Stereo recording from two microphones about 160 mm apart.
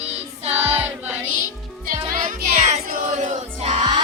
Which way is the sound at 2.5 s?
45° right (ahead or behind).